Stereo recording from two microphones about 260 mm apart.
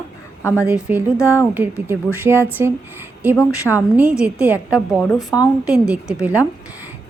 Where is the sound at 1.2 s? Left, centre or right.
Centre.